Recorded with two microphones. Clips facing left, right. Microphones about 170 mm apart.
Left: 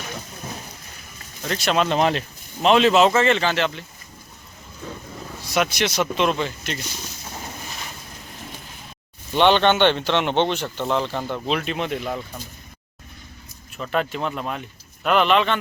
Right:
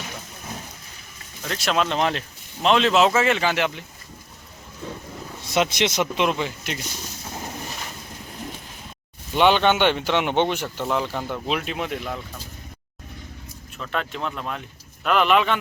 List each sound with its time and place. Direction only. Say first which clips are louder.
1.5 s speech: left 2 dB; centre (ahead or behind)
5.4 s speech: right 1 dB; 25° right (ahead or behind)
9.3 s speech: left 1 dB; 5° right (ahead or behind)
13.7 s speech: left 4 dB; 5° left (ahead or behind)